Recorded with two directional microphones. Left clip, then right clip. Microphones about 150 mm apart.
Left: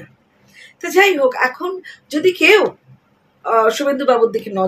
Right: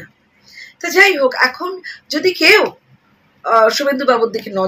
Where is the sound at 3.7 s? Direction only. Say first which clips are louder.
Right 1 dB; 10° left (ahead or behind).